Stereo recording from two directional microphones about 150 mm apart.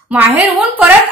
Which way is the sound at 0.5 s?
10° right (ahead or behind).